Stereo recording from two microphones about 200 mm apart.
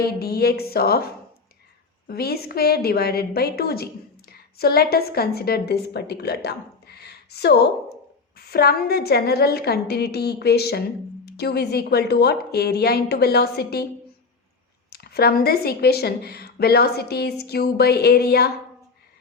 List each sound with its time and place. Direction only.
0.0 s speech: 50° left (ahead or behind)
2.0 s a woman's voice: 50° left (ahead or behind)
14.8 s speech: 50° left (ahead or behind)